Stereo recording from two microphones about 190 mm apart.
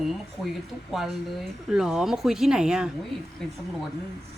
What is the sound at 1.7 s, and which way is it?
Speech, 5° right (ahead or behind).